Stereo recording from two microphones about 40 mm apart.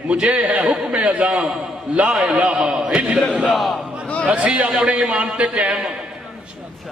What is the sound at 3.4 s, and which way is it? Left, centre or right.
Speech, centre.